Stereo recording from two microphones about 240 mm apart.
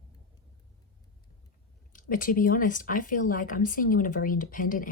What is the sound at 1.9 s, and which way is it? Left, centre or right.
Speech, left.